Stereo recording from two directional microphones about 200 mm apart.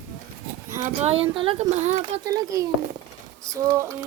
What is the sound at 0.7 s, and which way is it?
Speech, 35° right (ahead or behind).